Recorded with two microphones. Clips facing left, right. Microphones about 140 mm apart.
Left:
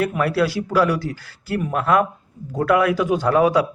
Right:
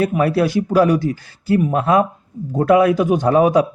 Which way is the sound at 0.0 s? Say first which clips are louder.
Right 3 dB; 20° right (ahead or behind).